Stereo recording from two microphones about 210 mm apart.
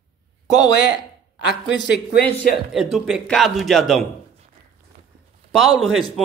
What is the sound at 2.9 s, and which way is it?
Speech, 5° right (ahead or behind).